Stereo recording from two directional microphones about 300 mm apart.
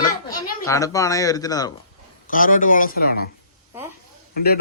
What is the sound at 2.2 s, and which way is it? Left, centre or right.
A man's voice, left.